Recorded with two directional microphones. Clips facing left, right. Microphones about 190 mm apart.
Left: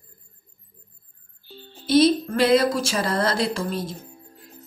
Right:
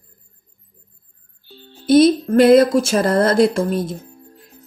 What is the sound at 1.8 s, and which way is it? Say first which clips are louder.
A woman's voice: right 5 dB; 50° right (ahead or behind).